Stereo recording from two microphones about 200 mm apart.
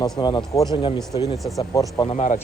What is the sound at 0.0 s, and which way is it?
Speech, 20° left (ahead or behind).